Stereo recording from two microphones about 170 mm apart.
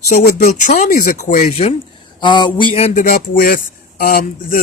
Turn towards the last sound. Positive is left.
turn(degrees=60)  # may be behind; listen again after turning